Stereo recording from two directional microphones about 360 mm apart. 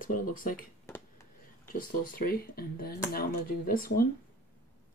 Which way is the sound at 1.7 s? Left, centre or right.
Left.